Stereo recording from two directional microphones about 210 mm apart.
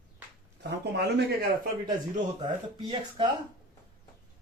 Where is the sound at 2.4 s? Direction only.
25° right (ahead or behind).